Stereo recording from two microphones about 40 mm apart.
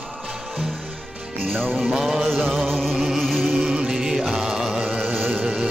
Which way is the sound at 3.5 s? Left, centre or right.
Centre.